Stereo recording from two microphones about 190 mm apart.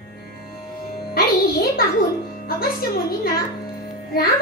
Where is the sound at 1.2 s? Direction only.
50° left (ahead or behind).